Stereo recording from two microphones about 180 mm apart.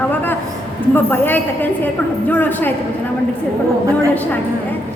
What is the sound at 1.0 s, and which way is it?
A woman's voice, 10° left (ahead or behind).